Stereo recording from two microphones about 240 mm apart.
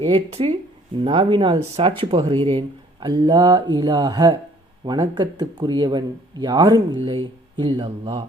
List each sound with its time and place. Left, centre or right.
0.0 s speech: right